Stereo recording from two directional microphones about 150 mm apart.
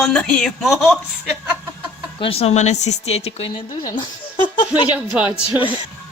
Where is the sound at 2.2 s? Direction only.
40° left (ahead or behind).